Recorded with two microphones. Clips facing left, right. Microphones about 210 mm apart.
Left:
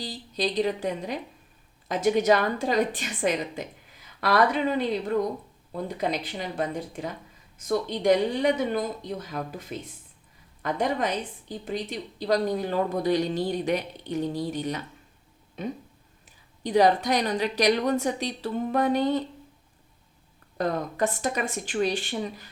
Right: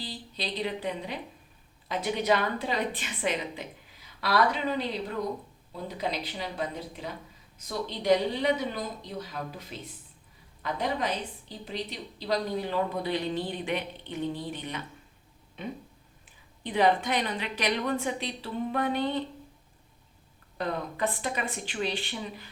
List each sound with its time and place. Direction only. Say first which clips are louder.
0.0 s a woman's voice: left 7 dB; 45° left (ahead or behind)
5.7 s a woman's voice: left 4 dB; 50° left (ahead or behind)
20.6 s a woman's voice: left 4 dB; 45° left (ahead or behind)